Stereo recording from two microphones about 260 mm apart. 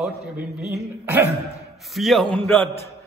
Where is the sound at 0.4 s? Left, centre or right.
Centre.